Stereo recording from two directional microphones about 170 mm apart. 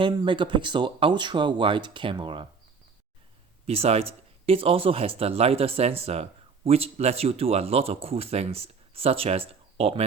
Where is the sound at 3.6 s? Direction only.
35° right (ahead or behind).